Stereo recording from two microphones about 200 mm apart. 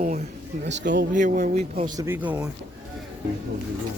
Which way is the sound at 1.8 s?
15° right (ahead or behind).